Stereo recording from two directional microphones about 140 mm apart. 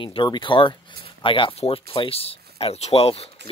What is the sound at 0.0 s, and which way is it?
Speech, 35° left (ahead or behind).